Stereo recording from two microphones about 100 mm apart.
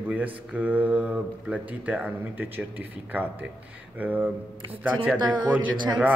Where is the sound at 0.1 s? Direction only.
15° right (ahead or behind).